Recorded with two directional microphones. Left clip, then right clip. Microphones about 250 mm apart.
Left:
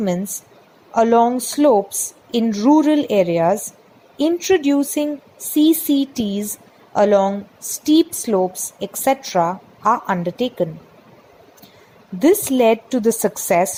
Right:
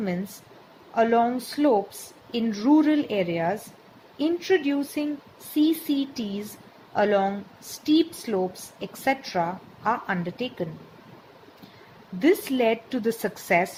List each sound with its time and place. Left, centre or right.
0.9 s a woman's voice: left
12.2 s a woman's voice: left